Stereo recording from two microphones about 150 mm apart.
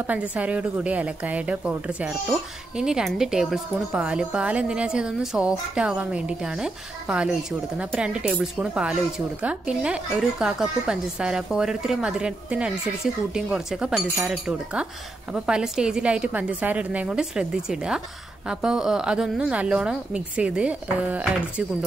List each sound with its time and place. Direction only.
0.0 s a woman's voice: 10° right (ahead or behind)